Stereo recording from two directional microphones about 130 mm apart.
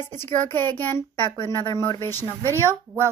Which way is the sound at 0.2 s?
15° left (ahead or behind).